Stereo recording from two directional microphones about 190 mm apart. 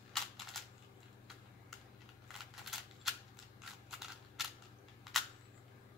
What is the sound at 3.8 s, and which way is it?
Scissors, centre (ahead or behind).